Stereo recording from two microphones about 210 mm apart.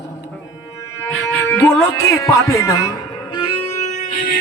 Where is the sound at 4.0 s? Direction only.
40° left (ahead or behind).